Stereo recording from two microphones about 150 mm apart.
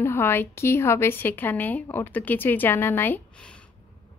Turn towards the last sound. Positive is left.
turn(degrees=5)  # may be behind; listen again after turning